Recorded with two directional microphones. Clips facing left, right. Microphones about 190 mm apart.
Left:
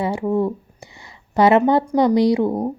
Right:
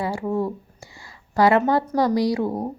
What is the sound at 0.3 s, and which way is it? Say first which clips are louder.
A woman's voice: left 4 dB; 20° left (ahead or behind).